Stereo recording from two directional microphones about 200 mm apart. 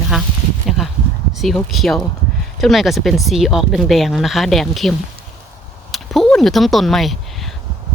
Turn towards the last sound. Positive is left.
turn(degrees=0)  # may be behind; listen again after turning